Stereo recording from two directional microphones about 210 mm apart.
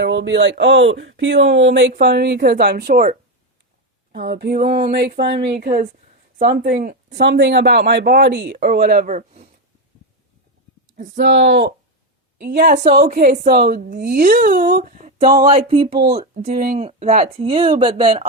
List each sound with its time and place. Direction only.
0.0 s speech: 55° right (ahead or behind)
7.2 s speech: 60° right (ahead or behind); by 9.5 s 35° right (ahead or behind)
10.9 s speech: 45° right (ahead or behind)
13.1 s speech: 40° right (ahead or behind)
16.3 s speech: 45° right (ahead or behind)
16.7 s speech: 30° right (ahead or behind)